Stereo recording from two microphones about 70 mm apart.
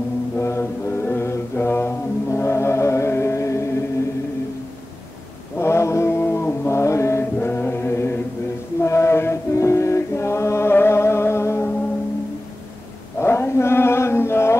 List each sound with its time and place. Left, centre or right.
0.4 s music: left
5.6 s mantra: left
8.8 s music: left
13.2 s a sound: left